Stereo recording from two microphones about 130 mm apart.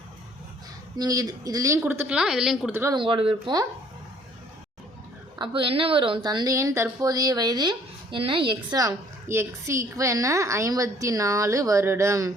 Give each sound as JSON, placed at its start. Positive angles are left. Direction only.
{"t": 0.9, "sound": "a woman's voice", "side_deg": -30}
{"t": 2.9, "sound": "a woman's voice", "side_deg": -40}
{"t": 5.4, "sound": "a woman's voice", "side_deg": -45}
{"t": 8.8, "sound": "a woman's voice", "side_deg": -20}